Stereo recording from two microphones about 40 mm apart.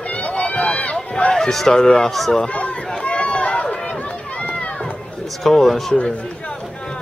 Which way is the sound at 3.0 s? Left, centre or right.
Left.